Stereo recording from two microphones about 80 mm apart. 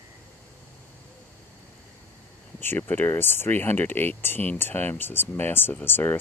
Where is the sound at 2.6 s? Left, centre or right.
Left.